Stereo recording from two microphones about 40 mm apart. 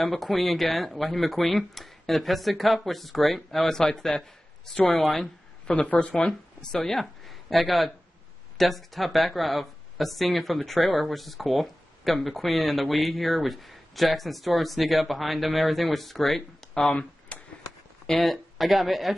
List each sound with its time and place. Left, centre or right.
0.0 s a man's voice: centre
5.7 s speech: left
6.7 s speech: centre
16.7 s speech: centre
17.3 s a sound: left
18.0 s speech: centre